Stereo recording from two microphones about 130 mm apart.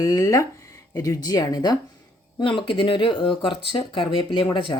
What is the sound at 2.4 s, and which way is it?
A woman's voice, 40° left (ahead or behind).